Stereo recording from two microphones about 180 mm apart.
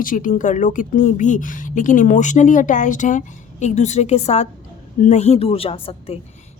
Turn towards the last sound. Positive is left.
turn(degrees=30)  # may be behind; listen again after turning